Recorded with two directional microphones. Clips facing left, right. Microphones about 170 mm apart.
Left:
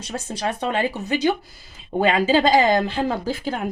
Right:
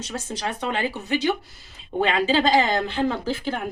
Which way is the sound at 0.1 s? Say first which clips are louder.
Left 4 dB; 35° left (ahead or behind).